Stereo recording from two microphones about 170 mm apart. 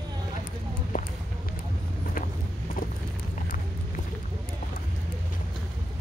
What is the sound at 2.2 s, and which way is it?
Clip-clop, 50° left (ahead or behind).